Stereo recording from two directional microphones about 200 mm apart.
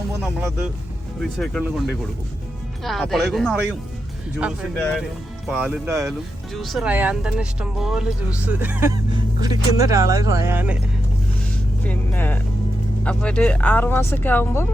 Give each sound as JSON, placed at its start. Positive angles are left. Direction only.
{"t": 1.4, "sound": "speech", "side_deg": 0}
{"t": 4.8, "sound": "speech", "side_deg": 5}
{"t": 6.1, "sound": "speech", "side_deg": 0}
{"t": 11.9, "sound": "speech", "side_deg": 10}